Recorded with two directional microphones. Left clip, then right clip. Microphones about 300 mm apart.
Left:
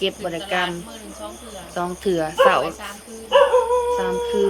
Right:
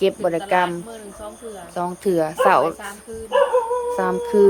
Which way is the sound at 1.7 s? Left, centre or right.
Centre.